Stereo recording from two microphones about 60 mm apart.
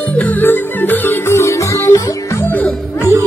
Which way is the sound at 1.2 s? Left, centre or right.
Left.